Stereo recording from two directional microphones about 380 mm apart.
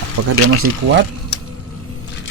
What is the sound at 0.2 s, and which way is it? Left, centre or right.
Speech, right.